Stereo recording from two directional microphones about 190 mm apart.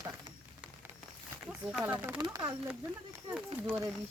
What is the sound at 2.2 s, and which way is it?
Speech, 20° right (ahead or behind).